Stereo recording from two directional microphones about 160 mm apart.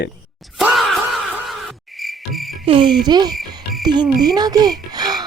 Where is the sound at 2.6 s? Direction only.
30° right (ahead or behind).